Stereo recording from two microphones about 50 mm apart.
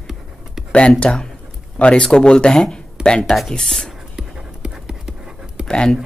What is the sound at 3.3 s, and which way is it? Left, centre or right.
Speech, centre.